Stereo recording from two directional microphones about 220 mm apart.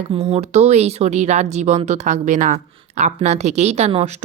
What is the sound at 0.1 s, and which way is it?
Speech, 30° right (ahead or behind).